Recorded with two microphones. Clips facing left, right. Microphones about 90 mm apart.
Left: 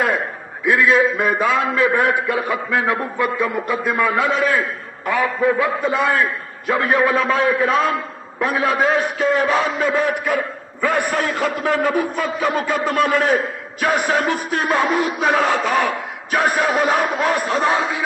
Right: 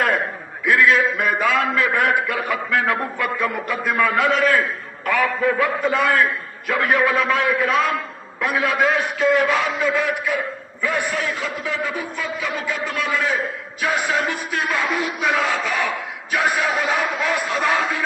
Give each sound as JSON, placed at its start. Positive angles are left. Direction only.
{"t": 0.6, "sound": "a man's voice", "side_deg": 25}